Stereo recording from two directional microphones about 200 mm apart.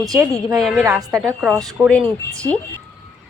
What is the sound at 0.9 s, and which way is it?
Speech, 15° right (ahead or behind).